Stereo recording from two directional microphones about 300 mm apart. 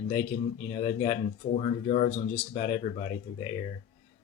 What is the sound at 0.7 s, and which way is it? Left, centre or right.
Speech, left.